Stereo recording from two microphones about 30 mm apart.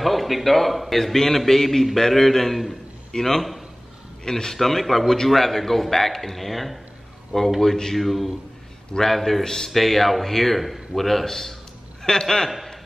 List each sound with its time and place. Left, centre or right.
0.0 s a man's voice: centre
3.1 s a man's voice: centre
4.6 s a man's voice: centre
7.6 s speech: centre
7.9 s a man's voice: centre
9.4 s speech: centre
9.7 s a man's voice: centre